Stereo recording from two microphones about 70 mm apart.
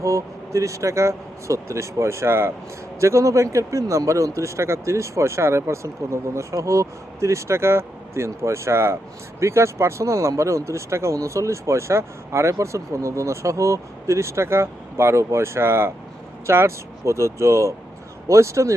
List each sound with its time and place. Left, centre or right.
0.0 s speech: right